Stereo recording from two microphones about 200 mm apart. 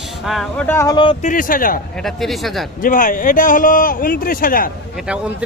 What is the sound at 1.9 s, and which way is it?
Speech, centre (ahead or behind).